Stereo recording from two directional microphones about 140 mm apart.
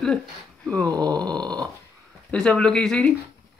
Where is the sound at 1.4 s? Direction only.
30° right (ahead or behind).